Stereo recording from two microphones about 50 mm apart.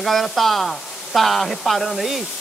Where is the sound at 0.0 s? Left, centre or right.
Centre.